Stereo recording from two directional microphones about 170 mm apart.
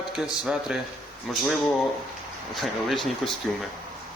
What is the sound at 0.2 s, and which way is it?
Speech, 5° right (ahead or behind).